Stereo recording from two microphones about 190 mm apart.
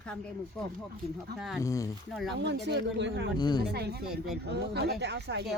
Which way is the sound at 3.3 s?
20° left (ahead or behind).